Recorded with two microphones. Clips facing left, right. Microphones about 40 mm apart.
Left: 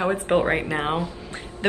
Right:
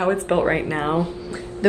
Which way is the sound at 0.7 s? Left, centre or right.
Left.